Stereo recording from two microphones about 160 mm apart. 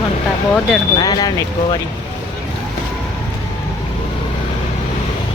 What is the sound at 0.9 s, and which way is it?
Speech, 25° left (ahead or behind).